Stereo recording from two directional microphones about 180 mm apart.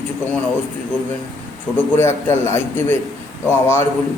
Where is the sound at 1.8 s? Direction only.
15° left (ahead or behind).